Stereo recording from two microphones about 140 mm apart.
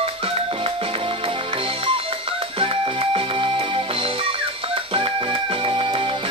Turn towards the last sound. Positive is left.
turn(degrees=-40)  # may be behind; listen again after turning